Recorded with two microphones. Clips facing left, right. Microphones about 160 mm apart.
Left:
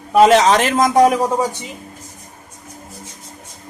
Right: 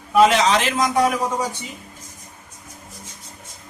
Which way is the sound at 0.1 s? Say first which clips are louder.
Left 4 dB; 40° left (ahead or behind).